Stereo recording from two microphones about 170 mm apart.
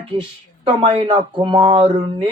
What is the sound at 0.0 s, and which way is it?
Speech, 30° right (ahead or behind).